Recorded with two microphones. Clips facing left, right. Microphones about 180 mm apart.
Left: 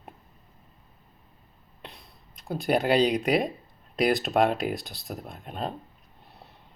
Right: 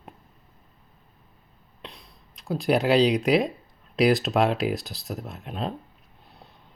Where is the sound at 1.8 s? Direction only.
55° left (ahead or behind).